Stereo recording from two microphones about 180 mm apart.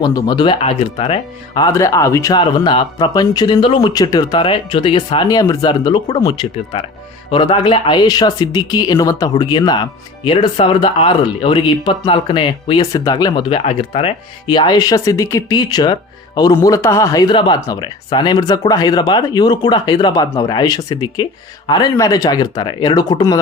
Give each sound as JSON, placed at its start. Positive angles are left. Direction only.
{"t": 0.0, "sound": "speech", "side_deg": 25}
{"t": 1.6, "sound": "speech", "side_deg": 15}